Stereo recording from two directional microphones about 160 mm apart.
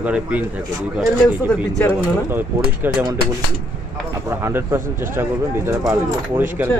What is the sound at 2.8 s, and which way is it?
Speech, 10° right (ahead or behind).